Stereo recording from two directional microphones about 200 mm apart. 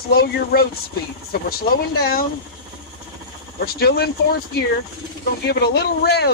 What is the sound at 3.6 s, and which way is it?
Speech, 50° left (ahead or behind).